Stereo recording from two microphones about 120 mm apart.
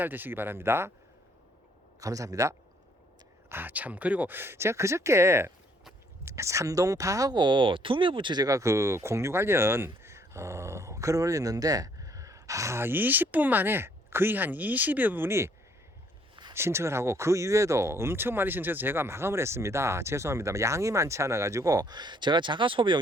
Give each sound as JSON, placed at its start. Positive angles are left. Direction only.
{"t": 0.0, "sound": "speech", "side_deg": -15}
{"t": 2.0, "sound": "speech", "side_deg": -30}
{"t": 3.5, "sound": "speech", "side_deg": -15}
{"t": 16.3, "sound": "a sound", "side_deg": -40}
{"t": 16.6, "sound": "speech", "side_deg": -20}